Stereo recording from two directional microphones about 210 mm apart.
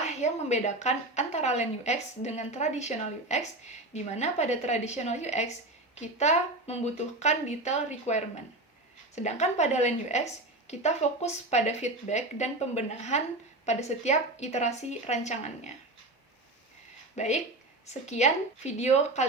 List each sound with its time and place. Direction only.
0.0 s a woman's voice: 30° left (ahead or behind)
17.2 s a woman's voice: 35° left (ahead or behind)